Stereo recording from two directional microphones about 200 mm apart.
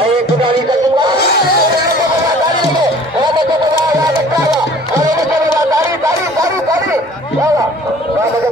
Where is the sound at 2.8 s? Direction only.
20° right (ahead or behind).